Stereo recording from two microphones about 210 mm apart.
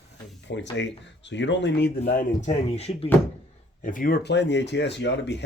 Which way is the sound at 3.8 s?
40° left (ahead or behind).